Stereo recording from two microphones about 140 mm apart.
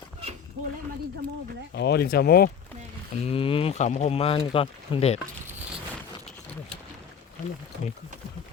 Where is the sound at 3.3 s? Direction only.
40° left (ahead or behind).